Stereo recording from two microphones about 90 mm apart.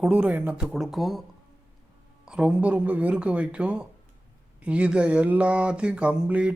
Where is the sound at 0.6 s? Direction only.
5° right (ahead or behind).